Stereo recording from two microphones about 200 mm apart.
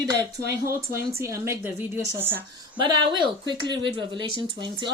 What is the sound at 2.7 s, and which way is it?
A woman's voice, 25° right (ahead or behind).